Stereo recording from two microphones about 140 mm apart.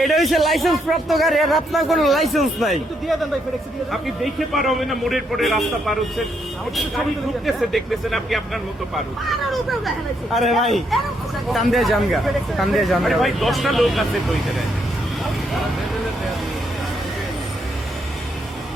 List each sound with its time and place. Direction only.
0.0 s a man's voice: centre (ahead or behind)
7.4 s a man's voice: centre (ahead or behind)